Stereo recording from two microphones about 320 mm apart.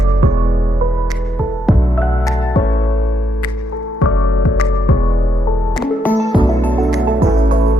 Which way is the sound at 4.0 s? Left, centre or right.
Left.